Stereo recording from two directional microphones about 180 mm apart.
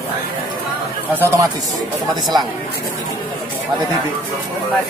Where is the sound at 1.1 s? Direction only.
15° right (ahead or behind).